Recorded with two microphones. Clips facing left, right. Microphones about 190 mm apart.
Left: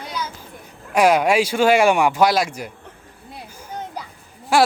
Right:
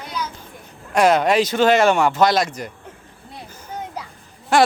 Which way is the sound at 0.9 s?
10° left (ahead or behind).